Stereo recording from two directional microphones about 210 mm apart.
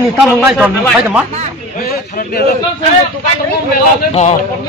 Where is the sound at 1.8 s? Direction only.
45° left (ahead or behind).